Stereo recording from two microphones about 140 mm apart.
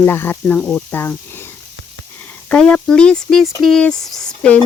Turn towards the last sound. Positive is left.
turn(degrees=5)  # may be behind; listen again after turning